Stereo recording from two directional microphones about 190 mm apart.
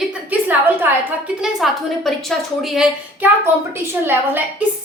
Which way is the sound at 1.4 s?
Centre (ahead or behind).